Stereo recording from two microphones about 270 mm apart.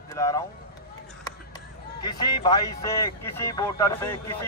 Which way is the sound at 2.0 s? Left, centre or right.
Centre.